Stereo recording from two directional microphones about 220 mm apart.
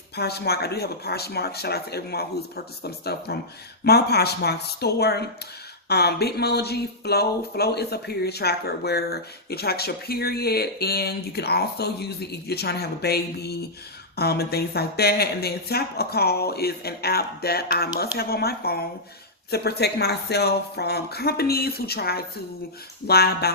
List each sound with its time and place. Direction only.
0.2 s speech: 45° left (ahead or behind)